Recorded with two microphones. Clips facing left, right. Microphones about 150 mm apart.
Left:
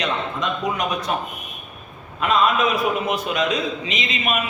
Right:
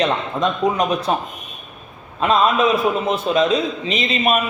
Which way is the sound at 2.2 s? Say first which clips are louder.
Right 3 dB; 30° right (ahead or behind).